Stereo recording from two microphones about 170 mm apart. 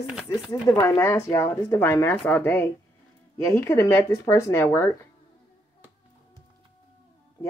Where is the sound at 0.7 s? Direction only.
15° left (ahead or behind).